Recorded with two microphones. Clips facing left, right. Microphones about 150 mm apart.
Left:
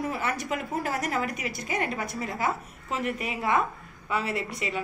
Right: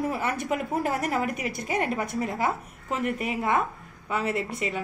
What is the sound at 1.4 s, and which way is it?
Speech, 60° right (ahead or behind).